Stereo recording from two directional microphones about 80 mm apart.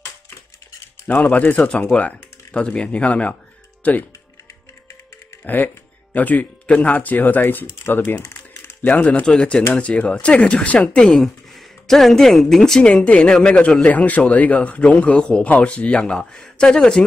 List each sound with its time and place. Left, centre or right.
1.0 s speech: left
5.4 s speech: left